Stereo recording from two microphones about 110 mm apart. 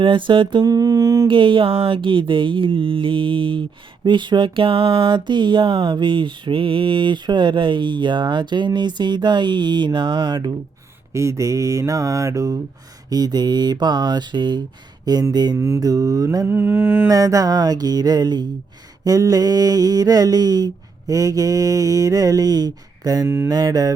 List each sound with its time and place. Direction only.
0.0 s mantra: 50° right (ahead or behind)
1.3 s a sound: 50° right (ahead or behind)
11.1 s mantra: 25° right (ahead or behind)
16.5 s mantra: 20° right (ahead or behind)
17.1 s mantra: 30° right (ahead or behind)